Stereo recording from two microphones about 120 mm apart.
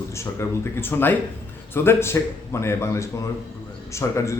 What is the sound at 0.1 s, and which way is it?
A man's voice, 25° left (ahead or behind).